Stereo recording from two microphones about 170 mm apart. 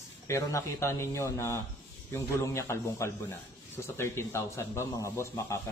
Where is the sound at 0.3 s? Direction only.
15° left (ahead or behind).